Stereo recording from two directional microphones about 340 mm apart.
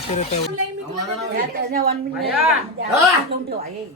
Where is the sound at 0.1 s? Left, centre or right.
Centre.